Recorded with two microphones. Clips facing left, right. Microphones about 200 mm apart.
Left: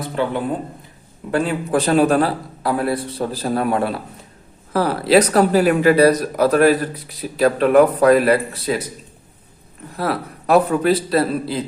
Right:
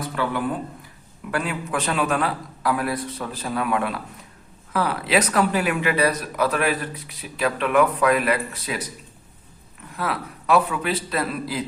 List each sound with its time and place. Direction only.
0.0 s speech: 25° left (ahead or behind)
9.9 s speech: 40° left (ahead or behind)